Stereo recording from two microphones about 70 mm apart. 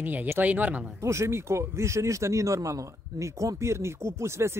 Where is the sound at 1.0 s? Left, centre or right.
Right.